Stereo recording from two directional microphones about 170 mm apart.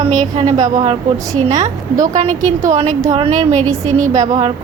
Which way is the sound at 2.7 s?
45° right (ahead or behind).